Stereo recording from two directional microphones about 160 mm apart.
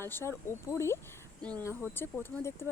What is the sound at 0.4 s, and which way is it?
Speech, 15° left (ahead or behind).